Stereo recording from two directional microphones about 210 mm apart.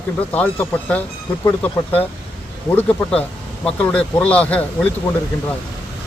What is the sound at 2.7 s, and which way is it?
Speech, 10° left (ahead or behind).